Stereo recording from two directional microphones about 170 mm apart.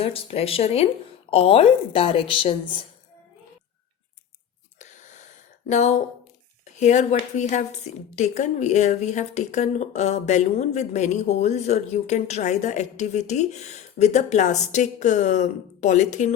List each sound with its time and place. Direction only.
0.0 s a woman's voice: 35° left (ahead or behind)
4.8 s wheeze: 45° left (ahead or behind)
5.6 s a woman's voice: 45° left (ahead or behind)